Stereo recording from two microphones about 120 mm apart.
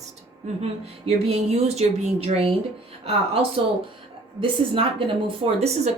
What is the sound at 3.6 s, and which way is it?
Speech, 50° right (ahead or behind).